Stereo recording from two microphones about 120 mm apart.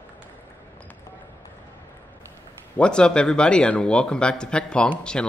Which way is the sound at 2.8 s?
5° left (ahead or behind).